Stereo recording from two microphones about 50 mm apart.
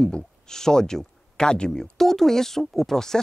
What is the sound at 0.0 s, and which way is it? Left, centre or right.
Speech, centre.